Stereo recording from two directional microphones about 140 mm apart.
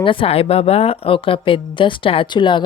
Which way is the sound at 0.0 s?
40° left (ahead or behind).